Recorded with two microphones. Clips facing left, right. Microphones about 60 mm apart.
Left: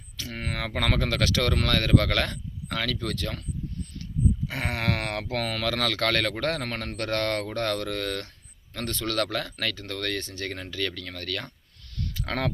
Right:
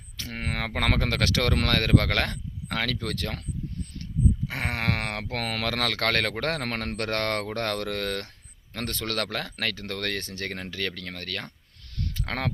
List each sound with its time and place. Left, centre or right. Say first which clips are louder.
0.2 s speech: right 1 dB; right
4.4 s a man's voice: even; right